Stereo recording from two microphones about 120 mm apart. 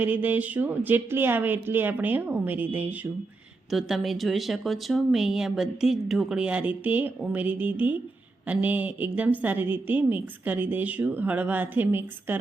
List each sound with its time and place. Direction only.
0.0 s a woman's voice: 15° right (ahead or behind)
3.7 s a woman's voice: centre (ahead or behind)